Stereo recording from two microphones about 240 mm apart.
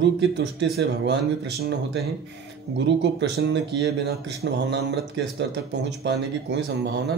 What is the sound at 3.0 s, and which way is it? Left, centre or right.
A man's voice, right.